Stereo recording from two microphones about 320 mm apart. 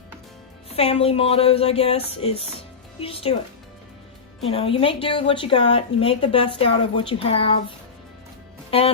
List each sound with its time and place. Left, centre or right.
0.7 s a woman's voice: centre
4.4 s a woman's voice: centre